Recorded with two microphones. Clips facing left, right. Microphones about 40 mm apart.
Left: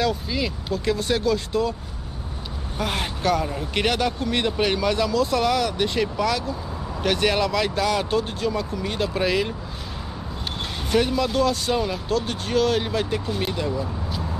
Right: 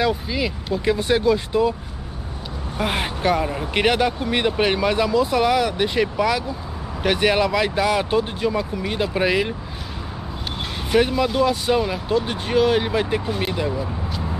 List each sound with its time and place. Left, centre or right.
0.0 s speech: centre
2.8 s speech: centre
10.9 s speech: centre